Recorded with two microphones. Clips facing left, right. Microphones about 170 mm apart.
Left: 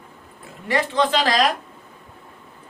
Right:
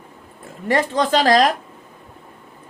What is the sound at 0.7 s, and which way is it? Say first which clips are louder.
Speech: right 2 dB; 45° right (ahead or behind).